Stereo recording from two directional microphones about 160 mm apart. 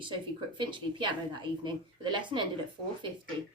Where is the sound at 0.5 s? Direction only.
30° right (ahead or behind).